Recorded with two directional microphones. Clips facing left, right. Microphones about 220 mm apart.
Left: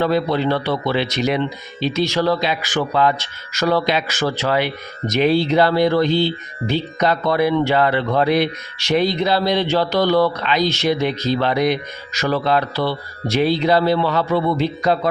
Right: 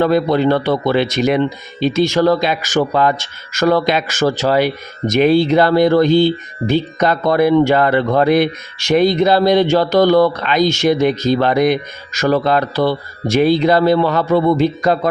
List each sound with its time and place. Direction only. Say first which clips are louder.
0.0 s speech: right 5 dB; 50° right (ahead or behind)